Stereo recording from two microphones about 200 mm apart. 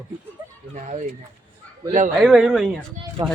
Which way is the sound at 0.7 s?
35° right (ahead or behind).